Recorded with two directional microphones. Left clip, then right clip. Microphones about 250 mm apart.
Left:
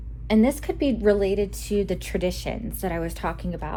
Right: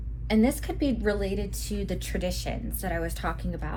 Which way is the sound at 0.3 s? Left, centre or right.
Left.